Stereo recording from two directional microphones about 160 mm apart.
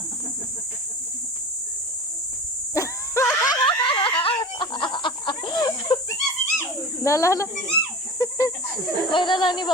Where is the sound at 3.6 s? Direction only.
30° left (ahead or behind).